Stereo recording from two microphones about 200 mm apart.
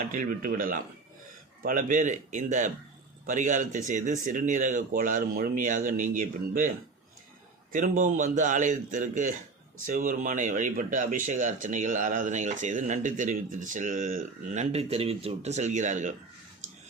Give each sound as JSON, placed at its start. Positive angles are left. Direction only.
{"t": 0.1, "sound": "speech", "side_deg": -45}
{"t": 7.7, "sound": "speech", "side_deg": -40}